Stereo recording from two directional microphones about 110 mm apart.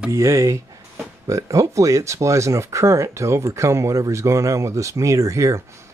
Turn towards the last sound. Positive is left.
turn(degrees=-30)  # may be behind; listen again after turning